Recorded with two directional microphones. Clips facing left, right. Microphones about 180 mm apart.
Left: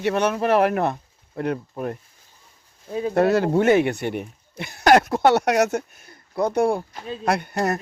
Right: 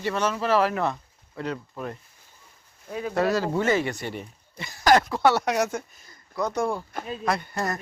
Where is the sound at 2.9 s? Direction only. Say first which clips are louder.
Left 5 dB; 30° left (ahead or behind).